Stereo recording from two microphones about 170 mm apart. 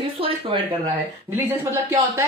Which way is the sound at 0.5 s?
30° right (ahead or behind).